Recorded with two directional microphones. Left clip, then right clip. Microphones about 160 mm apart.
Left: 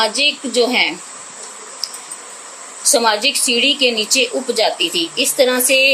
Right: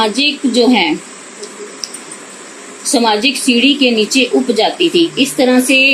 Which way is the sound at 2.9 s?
75° left (ahead or behind).